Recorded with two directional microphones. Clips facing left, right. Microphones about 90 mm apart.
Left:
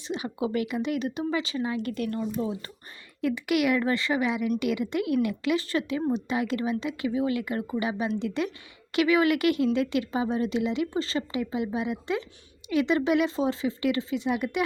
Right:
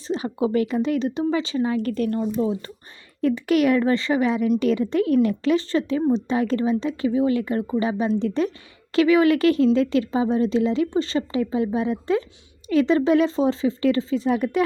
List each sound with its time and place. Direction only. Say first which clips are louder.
0.1 s speech: right 6 dB; 35° right (ahead or behind)